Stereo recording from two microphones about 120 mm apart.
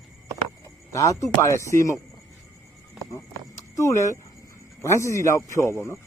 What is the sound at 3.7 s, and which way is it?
Speech, 25° left (ahead or behind).